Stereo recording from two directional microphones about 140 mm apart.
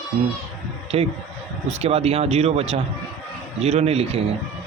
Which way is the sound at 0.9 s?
45° right (ahead or behind).